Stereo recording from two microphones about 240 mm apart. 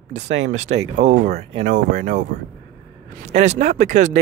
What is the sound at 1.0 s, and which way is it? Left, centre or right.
Speech, right.